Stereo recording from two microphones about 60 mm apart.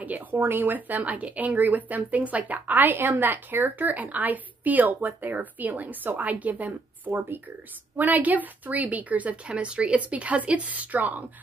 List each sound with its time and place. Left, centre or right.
0.0 s speech: right